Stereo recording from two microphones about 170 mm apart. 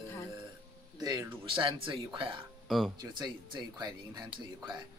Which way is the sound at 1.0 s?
25° right (ahead or behind).